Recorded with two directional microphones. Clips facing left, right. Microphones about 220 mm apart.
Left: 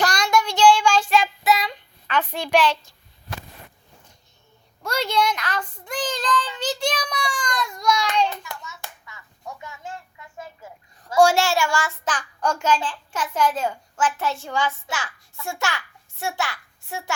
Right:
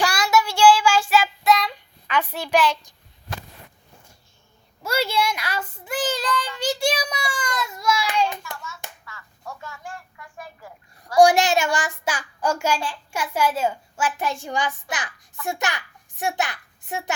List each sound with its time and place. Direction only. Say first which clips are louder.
0.0 s child singing: even; 5° right (ahead or behind)
2.0 s a child's voice: even; 10° right (ahead or behind)
4.8 s child singing: even; 5° right (ahead or behind)
9.0 s a sound: even; 20° left (ahead or behind)
11.2 s a child's voice: right 2 dB; 15° right (ahead or behind)